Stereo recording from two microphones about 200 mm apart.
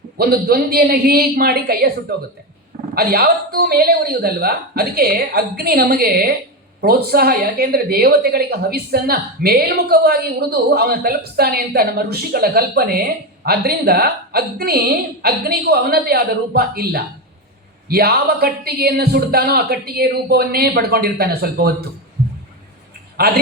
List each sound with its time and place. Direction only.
0.2 s a woman's voice: 50° right (ahead or behind)
23.2 s a woman's voice: 50° right (ahead or behind)